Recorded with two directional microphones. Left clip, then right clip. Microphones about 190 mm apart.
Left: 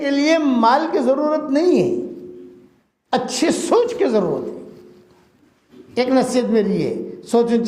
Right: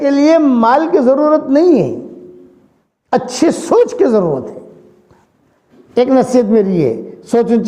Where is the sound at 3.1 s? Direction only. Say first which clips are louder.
Right 6 dB; 45° right (ahead or behind).